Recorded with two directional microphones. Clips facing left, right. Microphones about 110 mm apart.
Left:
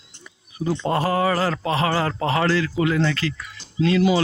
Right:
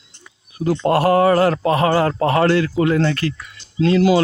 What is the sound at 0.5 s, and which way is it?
Speech, 80° right.